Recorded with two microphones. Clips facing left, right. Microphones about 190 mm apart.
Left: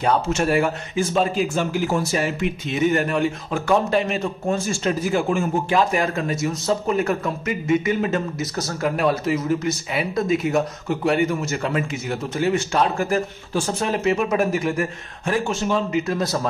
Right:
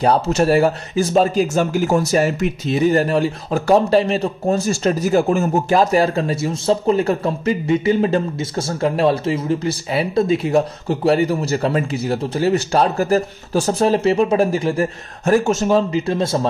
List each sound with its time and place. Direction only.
0.0 s speech: 35° right (ahead or behind)